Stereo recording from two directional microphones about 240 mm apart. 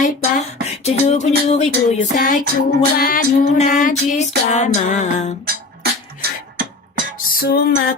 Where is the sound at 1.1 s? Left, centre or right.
Left.